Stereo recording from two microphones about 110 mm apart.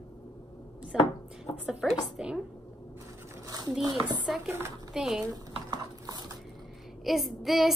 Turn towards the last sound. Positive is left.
turn(degrees=0)  # may be behind; listen again after turning